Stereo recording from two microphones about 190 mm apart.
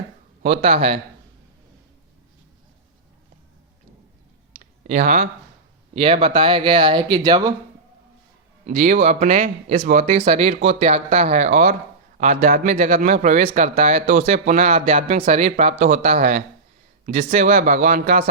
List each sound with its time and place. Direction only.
0.4 s speech: 35° right (ahead or behind)
4.6 s clicking: 40° right (ahead or behind)
5.9 s speech: 30° right (ahead or behind)
8.6 s speech: 40° right (ahead or behind)